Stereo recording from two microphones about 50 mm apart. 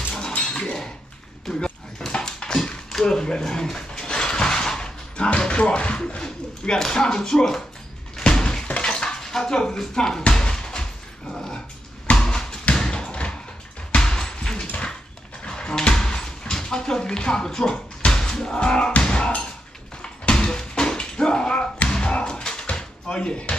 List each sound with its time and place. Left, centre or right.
0.3 s chink: centre
1.5 s dog: centre
2.9 s speech: centre
3.6 s music: centre
8.2 s door: centre
8.8 s a sound: centre
12.2 s bouncing: centre
13.9 s music: centre
15.4 s door: centre
18.0 s music: centre
20.0 s a sound: centre
21.8 s slam: centre